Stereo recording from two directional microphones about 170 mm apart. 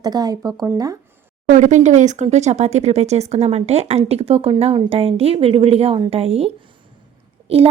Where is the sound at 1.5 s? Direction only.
45° right (ahead or behind).